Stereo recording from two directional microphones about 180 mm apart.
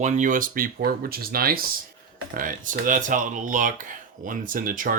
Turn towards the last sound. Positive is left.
turn(degrees=-50)  # may be behind; listen again after turning